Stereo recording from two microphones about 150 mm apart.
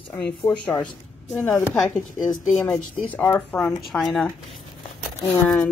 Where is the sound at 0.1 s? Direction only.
25° left (ahead or behind).